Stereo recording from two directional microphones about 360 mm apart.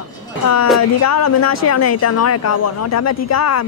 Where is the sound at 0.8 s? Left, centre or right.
Left.